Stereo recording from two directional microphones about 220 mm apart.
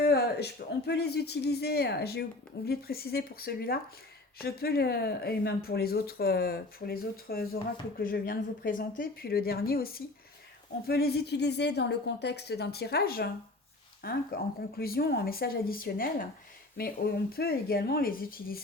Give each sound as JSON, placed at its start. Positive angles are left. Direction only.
{"t": 0.0, "sound": "speech", "side_deg": 45}